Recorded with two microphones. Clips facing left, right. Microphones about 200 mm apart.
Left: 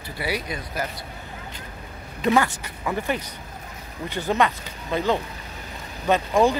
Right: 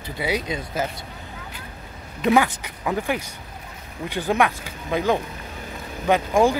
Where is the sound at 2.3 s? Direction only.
15° right (ahead or behind).